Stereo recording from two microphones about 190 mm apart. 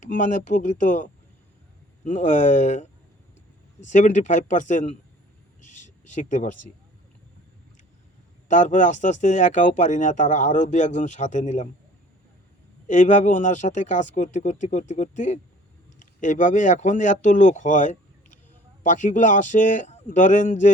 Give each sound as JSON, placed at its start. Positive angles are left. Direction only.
{"t": 0.0, "sound": "speech", "side_deg": 40}
{"t": 3.8, "sound": "speech", "side_deg": 40}
{"t": 5.6, "sound": "a sound", "side_deg": 40}
{"t": 8.4, "sound": "speech", "side_deg": 40}
{"t": 12.9, "sound": "speech", "side_deg": 40}